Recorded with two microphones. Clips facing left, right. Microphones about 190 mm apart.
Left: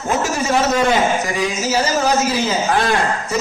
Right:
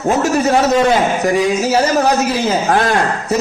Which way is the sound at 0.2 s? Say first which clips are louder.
Right 4 dB; 60° right (ahead or behind).